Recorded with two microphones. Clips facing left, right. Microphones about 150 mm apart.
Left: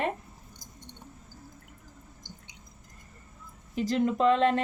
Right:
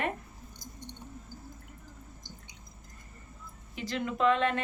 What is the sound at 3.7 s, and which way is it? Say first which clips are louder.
Speech: left 8 dB; 40° left (ahead or behind).